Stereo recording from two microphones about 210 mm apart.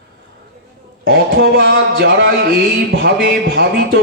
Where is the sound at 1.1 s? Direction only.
50° right (ahead or behind).